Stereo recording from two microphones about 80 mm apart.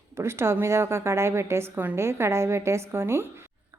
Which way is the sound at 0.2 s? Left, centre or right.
Right.